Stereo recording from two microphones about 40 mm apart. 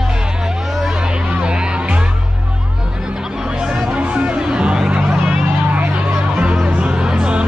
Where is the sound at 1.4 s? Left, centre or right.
Right.